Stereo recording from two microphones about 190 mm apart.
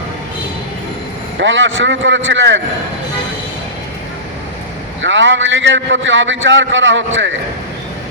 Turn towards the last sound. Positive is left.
turn(degrees=-85)